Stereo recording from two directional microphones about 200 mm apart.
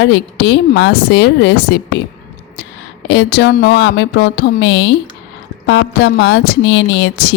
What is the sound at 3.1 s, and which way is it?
A woman's voice, 60° left (ahead or behind).